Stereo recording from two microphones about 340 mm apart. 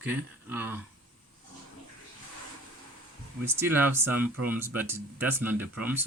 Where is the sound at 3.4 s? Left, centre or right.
Centre.